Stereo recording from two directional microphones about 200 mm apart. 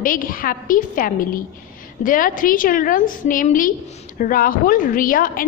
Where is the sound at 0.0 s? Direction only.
45° left (ahead or behind).